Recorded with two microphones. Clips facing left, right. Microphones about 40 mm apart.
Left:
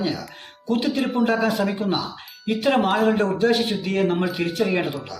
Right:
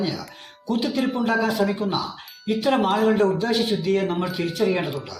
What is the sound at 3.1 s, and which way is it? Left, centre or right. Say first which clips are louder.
Speech: left 1 dB; left.